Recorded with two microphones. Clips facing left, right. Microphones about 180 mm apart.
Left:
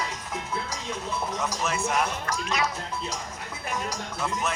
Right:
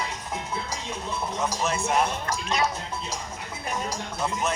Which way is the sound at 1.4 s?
30° right (ahead or behind).